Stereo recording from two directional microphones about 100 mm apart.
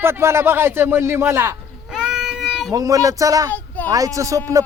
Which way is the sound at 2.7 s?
35° right (ahead or behind).